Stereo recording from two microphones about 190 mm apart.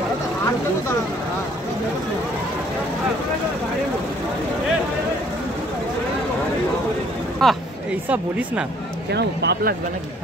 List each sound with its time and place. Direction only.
7.4 s speech: centre (ahead or behind)
9.1 s speech: 65° right (ahead or behind)